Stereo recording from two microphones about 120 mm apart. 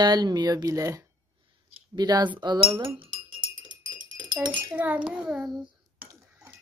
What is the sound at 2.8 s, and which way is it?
Chink, 45° right (ahead or behind).